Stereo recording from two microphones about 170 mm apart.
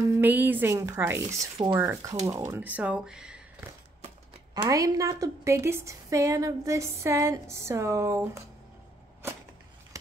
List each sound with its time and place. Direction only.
0.0 s a woman's voice: 15° right (ahead or behind)
4.6 s a woman's voice: 20° right (ahead or behind)